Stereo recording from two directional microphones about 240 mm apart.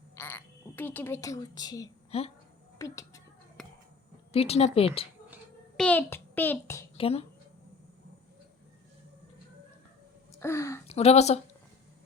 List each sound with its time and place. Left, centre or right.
0.2 s speech: centre; by 2.3 s left
2.7 s a woman's voice: centre
3.6 s a sound: centre
4.3 s speech: left
5.7 s a child's voice: centre
6.9 s speech: left
10.4 s speech: centre
10.8 s speech: left